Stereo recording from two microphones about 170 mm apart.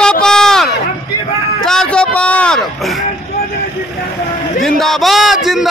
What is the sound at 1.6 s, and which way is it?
A man's voice, 5° left (ahead or behind).